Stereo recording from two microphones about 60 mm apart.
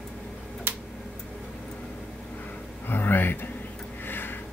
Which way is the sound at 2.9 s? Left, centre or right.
Left.